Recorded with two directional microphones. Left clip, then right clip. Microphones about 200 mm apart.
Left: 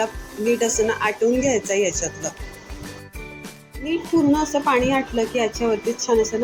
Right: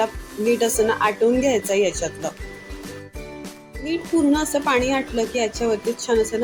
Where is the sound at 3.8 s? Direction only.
5° left (ahead or behind).